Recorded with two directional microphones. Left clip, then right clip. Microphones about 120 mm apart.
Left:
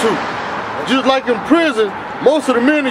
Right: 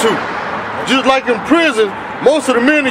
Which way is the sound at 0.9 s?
5° right (ahead or behind).